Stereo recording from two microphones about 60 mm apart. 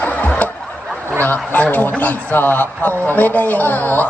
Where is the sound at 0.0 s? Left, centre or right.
Left.